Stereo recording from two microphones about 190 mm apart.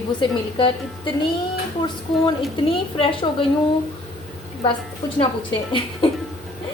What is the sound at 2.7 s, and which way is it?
Speech, 30° left (ahead or behind).